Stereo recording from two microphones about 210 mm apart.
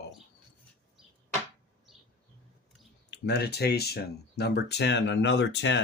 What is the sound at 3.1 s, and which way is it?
Speech, 50° left (ahead or behind).